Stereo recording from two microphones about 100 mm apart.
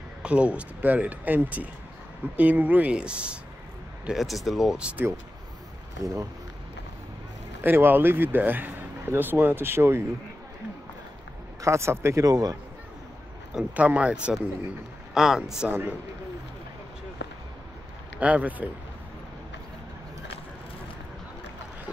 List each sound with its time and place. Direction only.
0.2 s speech: 10° right (ahead or behind)
7.6 s speech: 20° right (ahead or behind)
11.6 s speech: 30° right (ahead or behind)
13.5 s speech: 10° right (ahead or behind)
15.7 s speech: 20° right (ahead or behind)
18.2 s speech: 15° right (ahead or behind)